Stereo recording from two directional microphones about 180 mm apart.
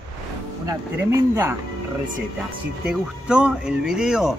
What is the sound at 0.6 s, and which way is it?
Speech, 15° right (ahead or behind).